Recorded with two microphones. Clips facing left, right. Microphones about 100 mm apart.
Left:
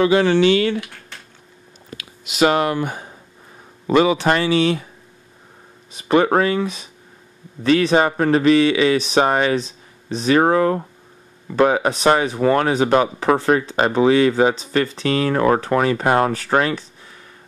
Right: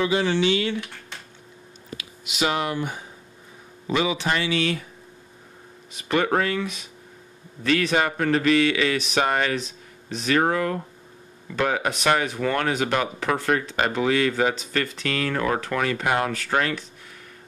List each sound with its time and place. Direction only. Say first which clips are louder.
0.0 s speech: left 7 dB; 60° left (ahead or behind)
2.0 s speech: left 9 dB; 55° left (ahead or behind)
4.5 s speech: left 7 dB; 30° left (ahead or behind)
5.9 s a man's voice: left 7 dB; 30° left (ahead or behind)